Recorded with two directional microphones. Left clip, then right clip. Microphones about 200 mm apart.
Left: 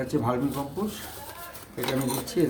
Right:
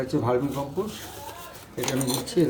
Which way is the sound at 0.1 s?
5° left (ahead or behind).